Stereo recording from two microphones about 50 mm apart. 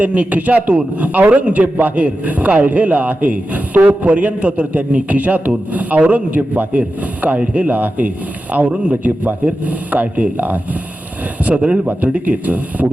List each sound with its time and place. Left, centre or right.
0.0 s speech: right
11.4 s speech: right